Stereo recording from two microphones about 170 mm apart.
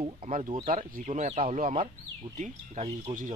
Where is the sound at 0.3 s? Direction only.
50° right (ahead or behind).